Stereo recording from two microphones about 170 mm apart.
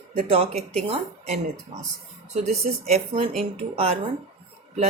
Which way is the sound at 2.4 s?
40° right (ahead or behind).